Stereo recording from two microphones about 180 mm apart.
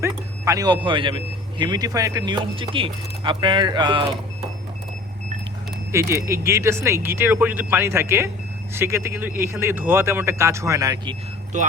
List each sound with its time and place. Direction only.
0.0 s speech: 20° right (ahead or behind)
5.9 s speech: 15° right (ahead or behind)
11.5 s speech: 40° right (ahead or behind)